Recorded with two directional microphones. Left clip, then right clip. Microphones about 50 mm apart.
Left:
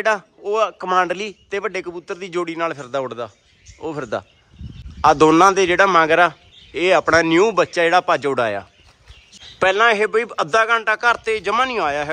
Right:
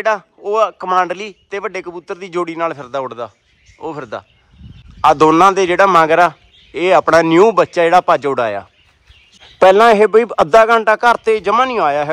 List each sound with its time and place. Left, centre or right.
0.4 s a man's voice: left
2.9 s a man's voice: left
9.6 s a man's voice: centre